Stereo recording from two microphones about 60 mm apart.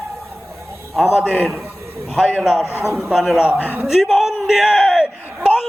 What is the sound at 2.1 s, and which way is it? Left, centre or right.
A man's voice, centre.